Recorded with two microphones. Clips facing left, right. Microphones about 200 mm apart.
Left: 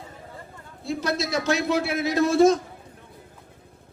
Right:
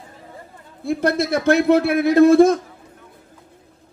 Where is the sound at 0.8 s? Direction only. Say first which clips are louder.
Right 7 dB; 55° right (ahead or behind).